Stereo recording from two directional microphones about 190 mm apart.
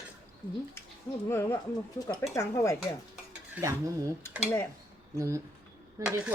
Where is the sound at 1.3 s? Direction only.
10° left (ahead or behind).